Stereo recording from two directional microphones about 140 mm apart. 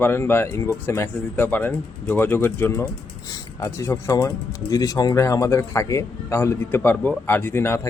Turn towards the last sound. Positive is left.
turn(degrees=15)  # may be behind; listen again after turning